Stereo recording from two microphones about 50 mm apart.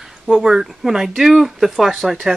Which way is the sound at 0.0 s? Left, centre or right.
Centre.